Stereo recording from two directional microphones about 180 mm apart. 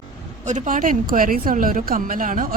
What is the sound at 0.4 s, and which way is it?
A woman's voice, 45° right (ahead or behind).